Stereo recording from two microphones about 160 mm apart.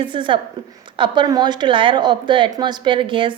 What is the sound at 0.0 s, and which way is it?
A woman's voice, 30° right (ahead or behind).